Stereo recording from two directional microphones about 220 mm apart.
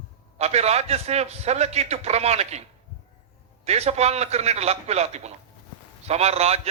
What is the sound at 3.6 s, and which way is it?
A man's voice, 30° right (ahead or behind).